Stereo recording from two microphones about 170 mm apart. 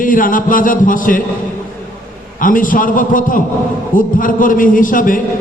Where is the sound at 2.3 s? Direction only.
55° left (ahead or behind).